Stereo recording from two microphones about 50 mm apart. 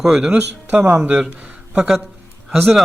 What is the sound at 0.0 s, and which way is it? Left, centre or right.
Speech, centre.